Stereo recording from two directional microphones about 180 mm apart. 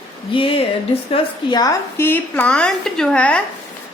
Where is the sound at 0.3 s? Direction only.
30° left (ahead or behind).